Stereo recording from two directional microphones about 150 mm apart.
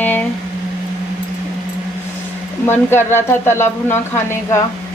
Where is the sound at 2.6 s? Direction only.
15° left (ahead or behind).